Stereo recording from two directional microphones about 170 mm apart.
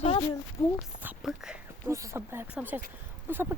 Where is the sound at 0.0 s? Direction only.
30° left (ahead or behind).